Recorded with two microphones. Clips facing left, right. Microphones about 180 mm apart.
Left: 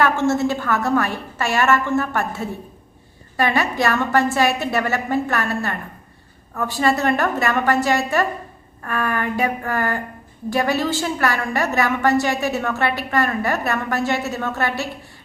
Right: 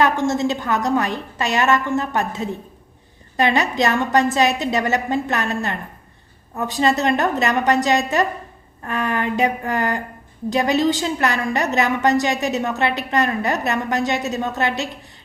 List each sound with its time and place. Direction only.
0.0 s a woman's voice: 15° right (ahead or behind)